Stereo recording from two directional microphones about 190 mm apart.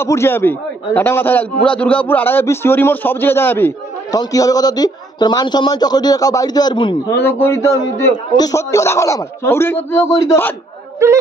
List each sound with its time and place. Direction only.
0.0 s a man's voice: 15° left (ahead or behind)
7.2 s a man's voice: 10° left (ahead or behind)
11.0 s music: 15° right (ahead or behind)